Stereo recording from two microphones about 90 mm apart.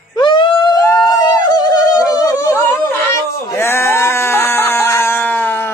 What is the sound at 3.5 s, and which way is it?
Sheep, 30° left (ahead or behind).